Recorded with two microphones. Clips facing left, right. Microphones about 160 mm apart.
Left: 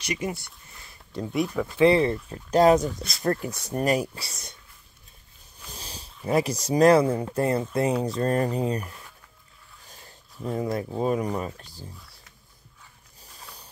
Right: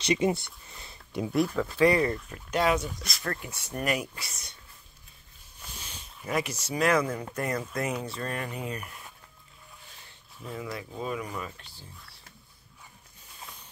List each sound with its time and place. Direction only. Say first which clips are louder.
0.0 s speech: right 5 dB; 25° right (ahead or behind)
1.3 s speech: even; 5° left (ahead or behind)
1.8 s speech: left 4 dB; 25° left (ahead or behind)
5.7 s speech: left 4 dB; 35° left (ahead or behind)
13.2 s a sound: left 1 dB; 35° left (ahead or behind)